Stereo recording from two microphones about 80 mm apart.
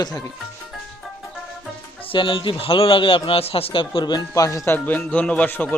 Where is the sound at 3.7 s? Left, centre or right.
Left.